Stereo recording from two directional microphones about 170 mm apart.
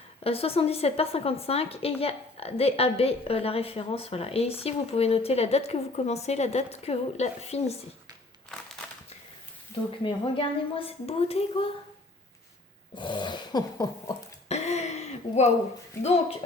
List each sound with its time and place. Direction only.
0.3 s a woman's voice: 35° left (ahead or behind)
10.0 s a woman's voice: 30° left (ahead or behind)
12.9 s dog: 25° left (ahead or behind)
14.4 s a sound: 40° left (ahead or behind)